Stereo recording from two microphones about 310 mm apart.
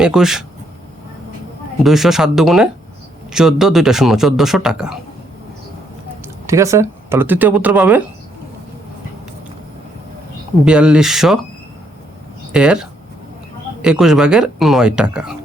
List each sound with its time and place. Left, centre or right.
0.0 s a man's voice: centre
1.8 s a man's voice: centre
6.2 s speech: centre
10.7 s a man's voice: centre
12.5 s a man's voice: centre